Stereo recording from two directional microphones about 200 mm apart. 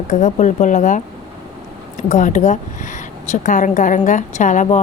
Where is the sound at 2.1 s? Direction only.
40° left (ahead or behind).